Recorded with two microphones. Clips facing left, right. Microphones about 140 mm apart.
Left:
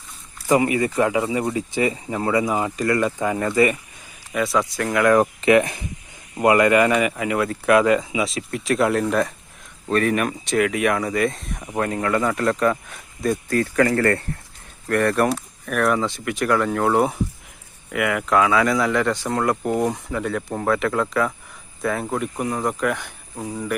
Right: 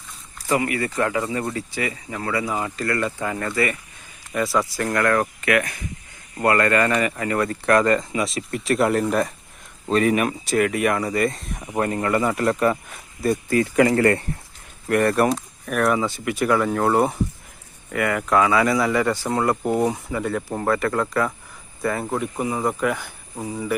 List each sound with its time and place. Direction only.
0.4 s speech: 20° left (ahead or behind)
4.3 s speech: centre (ahead or behind)
5.0 s speech: 20° left (ahead or behind); by 14.3 s 15° right (ahead or behind)
14.8 s speech: 5° right (ahead or behind)